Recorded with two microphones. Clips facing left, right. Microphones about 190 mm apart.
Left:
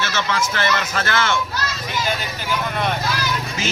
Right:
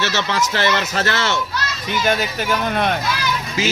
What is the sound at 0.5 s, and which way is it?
Speech, 25° right (ahead or behind).